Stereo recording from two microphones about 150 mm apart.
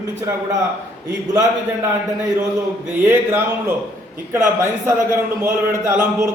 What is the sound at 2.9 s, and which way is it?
A man's voice, 15° right (ahead or behind).